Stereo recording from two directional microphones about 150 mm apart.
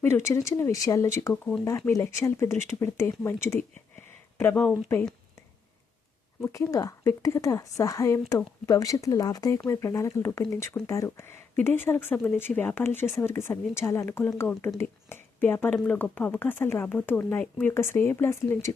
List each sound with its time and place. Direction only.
0.0 s a woman's voice: 15° left (ahead or behind)
6.4 s a woman's voice: 20° left (ahead or behind)